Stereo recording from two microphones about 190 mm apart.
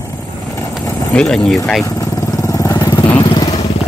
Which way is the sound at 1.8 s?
15° left (ahead or behind).